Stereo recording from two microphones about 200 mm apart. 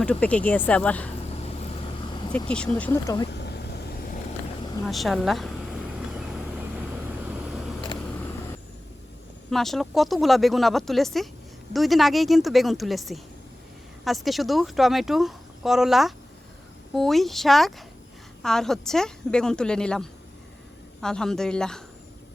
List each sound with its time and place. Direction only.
0.0 s speech: 5° left (ahead or behind)
2.3 s speech: 5° left (ahead or behind)
3.3 s vehicle: 55° left (ahead or behind)
4.8 s speech: centre (ahead or behind)
9.5 s speech: centre (ahead or behind)